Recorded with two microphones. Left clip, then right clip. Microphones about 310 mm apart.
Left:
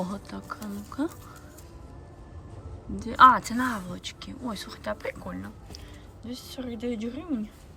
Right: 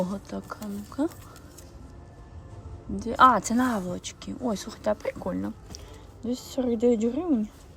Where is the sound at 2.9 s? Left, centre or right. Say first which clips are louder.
Left 2 dB; centre.